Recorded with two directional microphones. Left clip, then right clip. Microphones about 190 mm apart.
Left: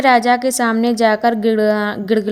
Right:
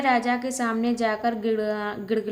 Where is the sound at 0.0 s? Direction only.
45° left (ahead or behind).